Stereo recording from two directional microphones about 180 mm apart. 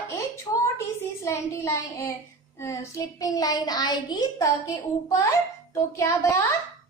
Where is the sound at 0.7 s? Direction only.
15° left (ahead or behind).